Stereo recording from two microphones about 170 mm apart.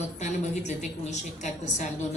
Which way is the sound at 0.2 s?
45° left (ahead or behind).